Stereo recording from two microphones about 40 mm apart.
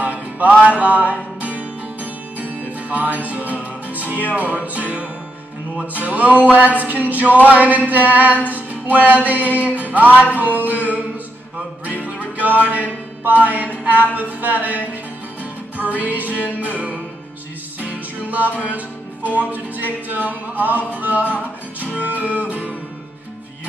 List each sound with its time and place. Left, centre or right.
0.0 s music: right
3.9 s speech: right
4.6 s music: right
15.8 s music: right
18.3 s music: right